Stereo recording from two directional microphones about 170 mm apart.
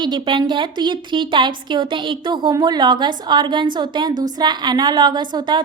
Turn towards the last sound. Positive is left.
turn(degrees=-25)  # may be behind; listen again after turning